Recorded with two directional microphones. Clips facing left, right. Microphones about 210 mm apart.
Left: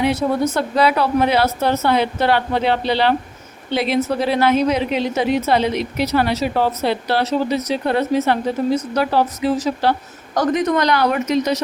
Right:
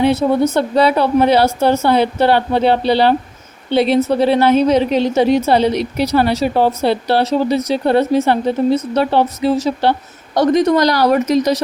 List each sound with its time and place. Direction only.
0.0 s a woman's voice: 25° right (ahead or behind)